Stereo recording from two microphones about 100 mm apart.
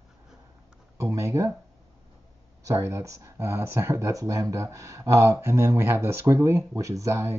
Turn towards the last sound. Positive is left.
turn(degrees=-30)  # may be behind; listen again after turning